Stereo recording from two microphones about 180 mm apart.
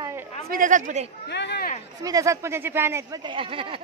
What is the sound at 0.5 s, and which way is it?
Speech, 45° right (ahead or behind).